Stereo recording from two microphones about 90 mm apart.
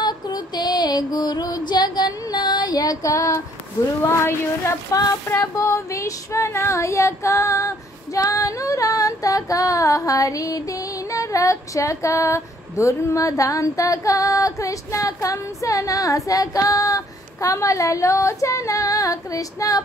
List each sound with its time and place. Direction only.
0.0 s female singing: 50° left (ahead or behind); by 3.4 s 35° left (ahead or behind)
4.2 s speech: 30° left (ahead or behind)
4.9 s female singing: 40° left (ahead or behind)